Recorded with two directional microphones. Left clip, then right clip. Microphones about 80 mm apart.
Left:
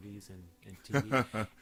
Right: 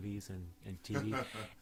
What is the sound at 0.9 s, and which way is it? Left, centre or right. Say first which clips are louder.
Speech: left 8 dB; left.